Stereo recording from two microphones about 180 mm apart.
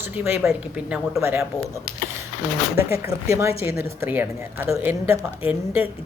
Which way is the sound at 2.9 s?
15° right (ahead or behind).